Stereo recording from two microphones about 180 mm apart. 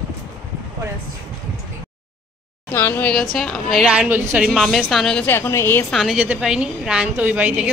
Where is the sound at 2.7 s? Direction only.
10° left (ahead or behind).